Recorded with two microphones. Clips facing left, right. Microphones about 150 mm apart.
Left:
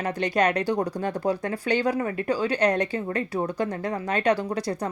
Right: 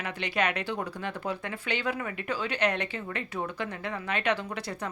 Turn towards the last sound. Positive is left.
turn(degrees=40)  # may be behind; listen again after turning